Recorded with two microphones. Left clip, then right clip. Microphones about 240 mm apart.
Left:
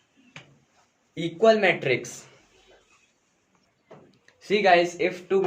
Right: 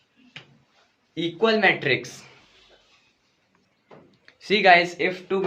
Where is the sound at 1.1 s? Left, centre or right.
Right.